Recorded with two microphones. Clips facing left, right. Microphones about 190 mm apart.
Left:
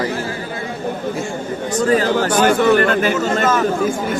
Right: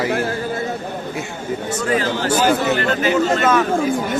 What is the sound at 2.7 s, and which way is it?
Speech, 50° left (ahead or behind).